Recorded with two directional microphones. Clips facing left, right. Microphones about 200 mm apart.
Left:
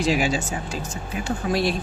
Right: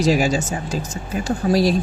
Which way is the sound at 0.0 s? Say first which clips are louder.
Right 4 dB; 40° right (ahead or behind).